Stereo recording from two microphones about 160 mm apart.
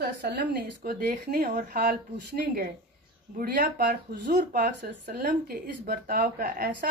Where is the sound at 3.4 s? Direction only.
65° right (ahead or behind).